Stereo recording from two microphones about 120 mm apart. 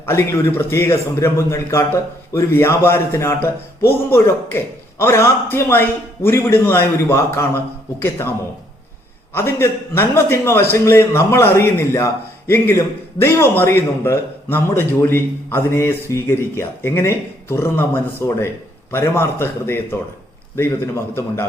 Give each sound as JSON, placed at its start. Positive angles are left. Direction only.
{"t": 0.0, "sound": "a man's voice", "side_deg": 25}
{"t": 9.3, "sound": "a man's voice", "side_deg": 20}